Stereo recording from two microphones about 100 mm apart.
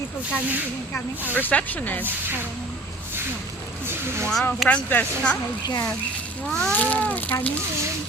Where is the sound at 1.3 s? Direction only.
15° left (ahead or behind).